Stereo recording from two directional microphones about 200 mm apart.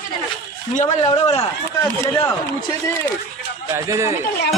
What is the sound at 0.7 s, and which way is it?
Speech, 35° left (ahead or behind).